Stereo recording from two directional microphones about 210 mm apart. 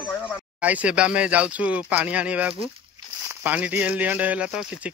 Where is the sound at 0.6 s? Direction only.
5° right (ahead or behind).